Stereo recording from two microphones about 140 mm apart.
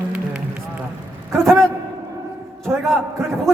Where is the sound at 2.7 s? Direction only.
5° right (ahead or behind).